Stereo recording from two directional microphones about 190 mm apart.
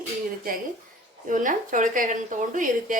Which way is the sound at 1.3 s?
45° right (ahead or behind).